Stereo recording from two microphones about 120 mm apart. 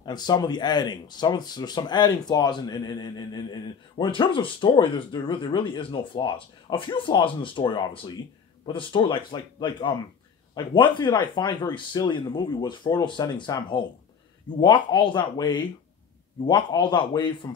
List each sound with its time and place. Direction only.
0.0 s speech: 35° left (ahead or behind)